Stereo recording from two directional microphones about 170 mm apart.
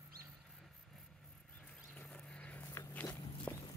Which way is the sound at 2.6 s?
15° left (ahead or behind).